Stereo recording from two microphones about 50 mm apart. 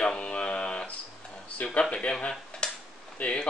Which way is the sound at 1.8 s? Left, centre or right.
Centre.